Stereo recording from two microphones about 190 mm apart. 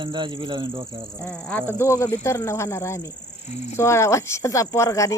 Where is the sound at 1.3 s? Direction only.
5° left (ahead or behind).